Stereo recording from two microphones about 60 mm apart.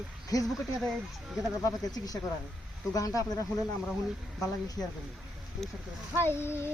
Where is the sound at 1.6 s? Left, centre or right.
Left.